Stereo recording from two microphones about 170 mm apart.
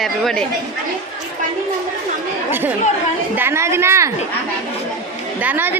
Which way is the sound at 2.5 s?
10° right (ahead or behind).